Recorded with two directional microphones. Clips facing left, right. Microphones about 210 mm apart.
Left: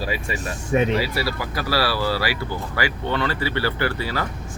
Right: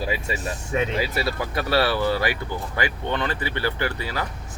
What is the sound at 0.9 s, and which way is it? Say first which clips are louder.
Speech: left 1 dB; 20° right (ahead or behind).